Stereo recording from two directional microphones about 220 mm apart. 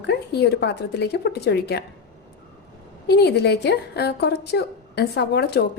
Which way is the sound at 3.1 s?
50° left (ahead or behind).